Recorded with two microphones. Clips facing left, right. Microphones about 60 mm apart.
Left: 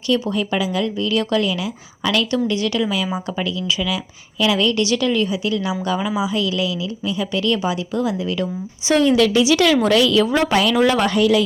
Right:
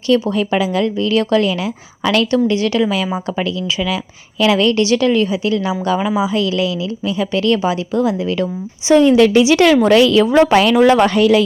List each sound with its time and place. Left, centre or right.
0.1 s a woman's voice: right
9.0 s a woman's voice: right
11.1 s a woman's voice: right